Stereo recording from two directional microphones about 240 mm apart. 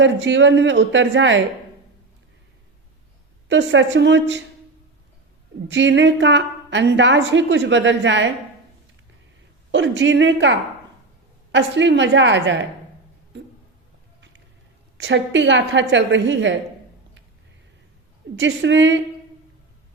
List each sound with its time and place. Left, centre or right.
0.0 s a woman's voice: right
3.5 s a woman's voice: right
5.6 s a woman's voice: right
9.7 s a woman's voice: right
14.9 s a woman's voice: right
18.3 s a woman's voice: right